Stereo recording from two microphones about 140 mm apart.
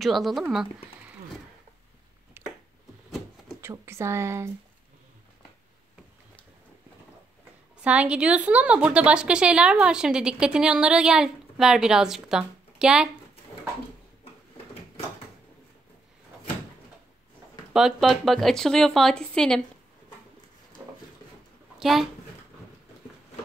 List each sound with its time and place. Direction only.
0.0 s a woman's voice: centre (ahead or behind)
2.4 s a sound: 15° right (ahead or behind)
3.6 s speech: 20° right (ahead or behind)
7.8 s a woman's voice: 10° right (ahead or behind)
17.7 s a woman's voice: centre (ahead or behind)
20.8 s a sound: 15° right (ahead or behind)
21.7 s speech: centre (ahead or behind)